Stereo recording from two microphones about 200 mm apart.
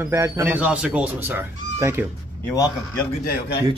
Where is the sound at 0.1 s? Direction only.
15° right (ahead or behind).